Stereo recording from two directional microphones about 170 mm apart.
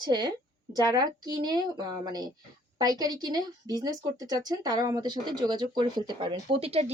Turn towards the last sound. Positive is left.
turn(degrees=-35)  # may be behind; listen again after turning